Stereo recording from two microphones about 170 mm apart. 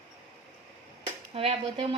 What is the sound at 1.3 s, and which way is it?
Speech, 35° right (ahead or behind).